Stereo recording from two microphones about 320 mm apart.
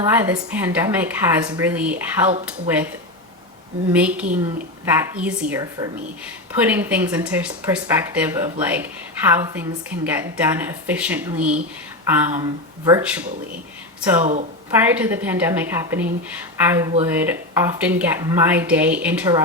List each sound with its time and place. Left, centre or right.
0.0 s speech: centre
3.9 s speech: centre